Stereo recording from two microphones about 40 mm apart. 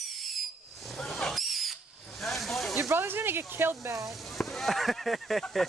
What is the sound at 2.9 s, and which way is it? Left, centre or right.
Speech, right.